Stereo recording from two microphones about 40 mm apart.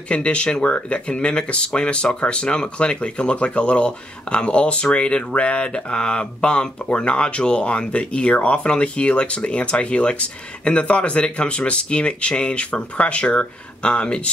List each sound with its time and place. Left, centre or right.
0.1 s speech: left